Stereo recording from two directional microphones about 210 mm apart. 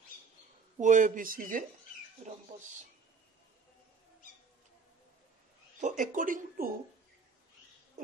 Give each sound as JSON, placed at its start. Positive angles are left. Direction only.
{"t": 0.7, "sound": "speech", "side_deg": -35}
{"t": 2.2, "sound": "speech", "side_deg": -30}
{"t": 5.8, "sound": "speech", "side_deg": -35}